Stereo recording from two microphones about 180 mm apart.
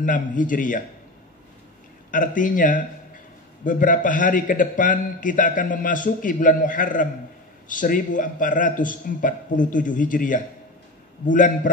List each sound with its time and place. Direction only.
0.0 s a man's voice: 45° left (ahead or behind)
2.0 s a man's voice: 45° left (ahead or behind)